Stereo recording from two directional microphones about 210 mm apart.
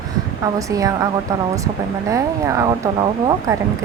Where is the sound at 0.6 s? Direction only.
15° right (ahead or behind).